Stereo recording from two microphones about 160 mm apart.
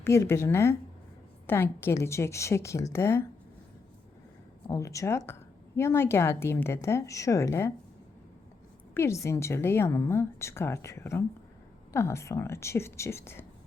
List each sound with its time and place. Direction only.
0.0 s a woman's voice: 15° left (ahead or behind)
4.7 s a woman's voice: 20° left (ahead or behind)
9.0 s a woman's voice: 15° left (ahead or behind)